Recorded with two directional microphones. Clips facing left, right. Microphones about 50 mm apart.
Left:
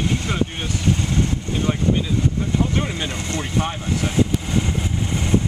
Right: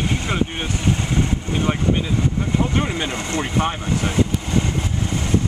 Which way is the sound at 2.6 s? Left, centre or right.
Centre.